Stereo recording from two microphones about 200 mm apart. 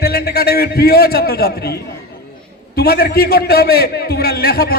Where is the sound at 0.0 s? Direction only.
50° left (ahead or behind).